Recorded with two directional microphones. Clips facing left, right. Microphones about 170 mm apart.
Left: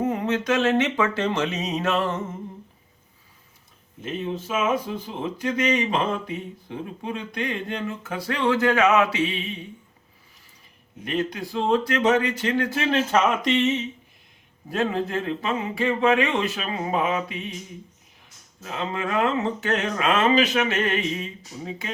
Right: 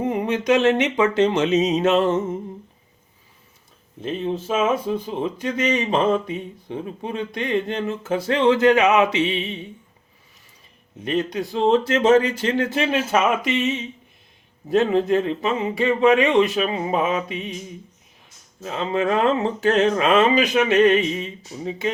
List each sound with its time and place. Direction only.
0.0 s speech: 15° right (ahead or behind)
4.0 s speech: 30° right (ahead or behind)
11.0 s speech: 25° right (ahead or behind)
14.7 s speech: 20° right (ahead or behind)
18.6 s speech: 25° right (ahead or behind)